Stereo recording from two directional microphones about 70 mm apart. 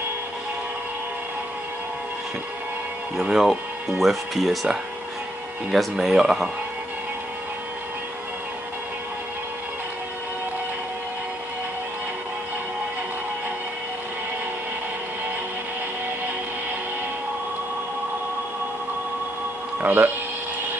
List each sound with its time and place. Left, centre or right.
3.2 s speech: centre
19.8 s speech: right